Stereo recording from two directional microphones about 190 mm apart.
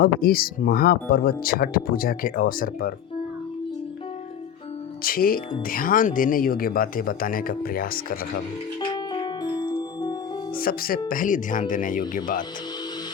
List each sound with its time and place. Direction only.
0.0 s speech: 50° left (ahead or behind)
5.0 s speech: 50° left (ahead or behind)
9.1 s music: 20° left (ahead or behind)
10.6 s speech: 50° left (ahead or behind)